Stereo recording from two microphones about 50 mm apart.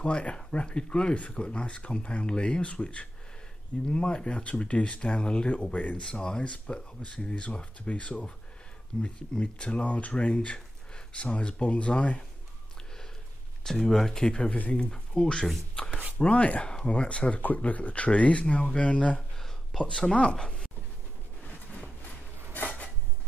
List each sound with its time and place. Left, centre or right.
0.0 s speech: left
13.7 s speech: centre
15.9 s a sound: right
16.2 s speech: left
19.8 s speech: centre
22.5 s dishes: left